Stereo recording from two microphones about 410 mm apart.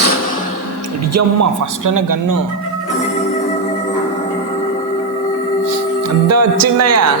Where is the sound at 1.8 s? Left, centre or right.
Right.